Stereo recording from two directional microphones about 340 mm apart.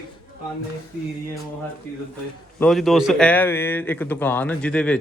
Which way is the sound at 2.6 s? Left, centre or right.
Centre.